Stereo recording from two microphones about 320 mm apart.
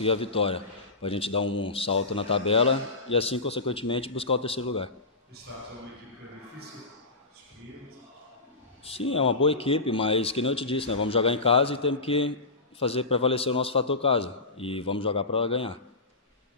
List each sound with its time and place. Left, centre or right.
0.0 s a man's voice: centre
8.8 s a man's voice: centre